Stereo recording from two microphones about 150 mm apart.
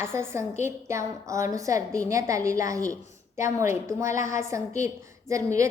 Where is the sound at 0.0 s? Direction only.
15° right (ahead or behind).